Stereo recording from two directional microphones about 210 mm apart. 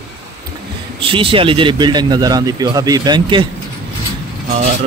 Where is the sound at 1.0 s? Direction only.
25° right (ahead or behind).